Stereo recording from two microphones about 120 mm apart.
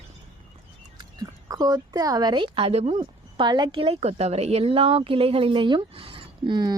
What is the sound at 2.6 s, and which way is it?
Speech, 60° right (ahead or behind).